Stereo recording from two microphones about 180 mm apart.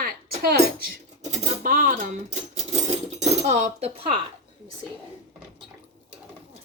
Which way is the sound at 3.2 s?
40° right (ahead or behind).